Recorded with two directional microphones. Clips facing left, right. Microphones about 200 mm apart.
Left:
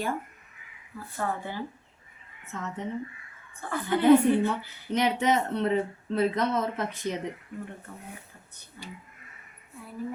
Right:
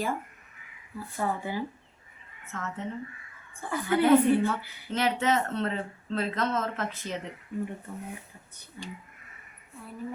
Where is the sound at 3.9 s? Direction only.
15° left (ahead or behind).